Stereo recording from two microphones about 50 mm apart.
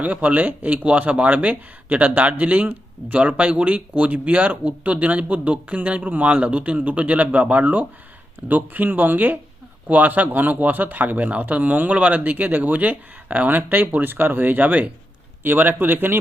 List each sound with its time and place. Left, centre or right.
0.0 s speech: right